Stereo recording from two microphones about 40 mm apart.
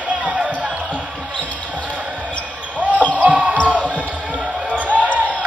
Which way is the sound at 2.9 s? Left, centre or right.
Left.